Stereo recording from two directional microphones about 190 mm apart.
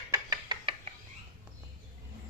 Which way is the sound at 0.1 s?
20° right (ahead or behind).